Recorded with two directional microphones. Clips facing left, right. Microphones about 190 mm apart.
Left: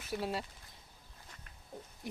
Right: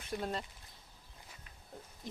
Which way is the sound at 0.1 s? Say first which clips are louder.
Left 1 dB; 5° left (ahead or behind).